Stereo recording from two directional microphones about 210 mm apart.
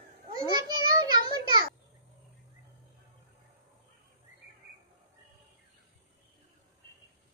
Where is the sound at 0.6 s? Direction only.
20° right (ahead or behind).